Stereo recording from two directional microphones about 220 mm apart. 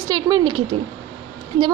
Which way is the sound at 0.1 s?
20° right (ahead or behind).